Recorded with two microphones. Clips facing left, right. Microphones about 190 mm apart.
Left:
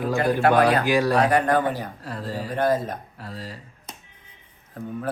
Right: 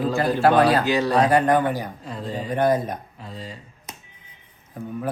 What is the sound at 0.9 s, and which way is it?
Speech, 10° left (ahead or behind).